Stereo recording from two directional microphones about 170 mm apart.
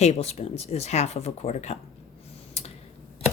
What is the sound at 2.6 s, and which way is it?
Tick-tock, 40° left (ahead or behind).